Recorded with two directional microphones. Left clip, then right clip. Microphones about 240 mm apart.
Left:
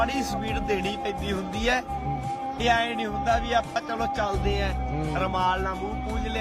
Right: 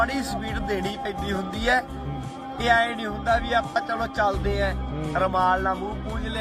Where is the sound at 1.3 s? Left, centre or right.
Left.